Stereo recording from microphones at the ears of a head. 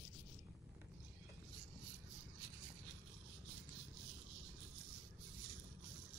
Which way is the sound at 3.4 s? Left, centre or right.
Right.